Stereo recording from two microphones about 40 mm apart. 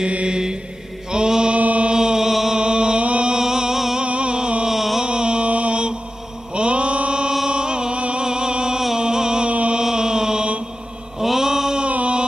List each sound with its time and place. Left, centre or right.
0.0 s mantra: right
1.6 s chant: right
1.9 s chant: centre
2.6 s music: right
3.3 s music: centre
4.0 s music: right
4.6 s a sound: centre
5.0 s mantra: right
7.4 s music: right
9.5 s mantra: right
9.8 s chant: centre
11.1 s mantra: centre
11.8 s a sound: right